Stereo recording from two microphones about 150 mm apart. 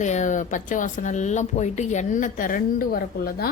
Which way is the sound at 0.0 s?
55° left (ahead or behind).